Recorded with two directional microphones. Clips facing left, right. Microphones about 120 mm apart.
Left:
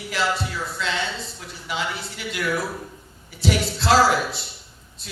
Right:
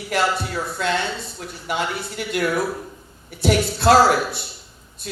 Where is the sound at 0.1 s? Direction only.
55° right (ahead or behind).